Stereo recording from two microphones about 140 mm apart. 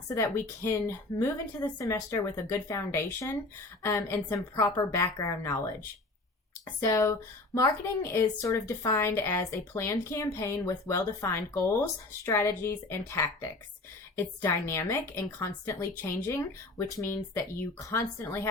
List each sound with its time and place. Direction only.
0.1 s a woman's voice: 20° left (ahead or behind)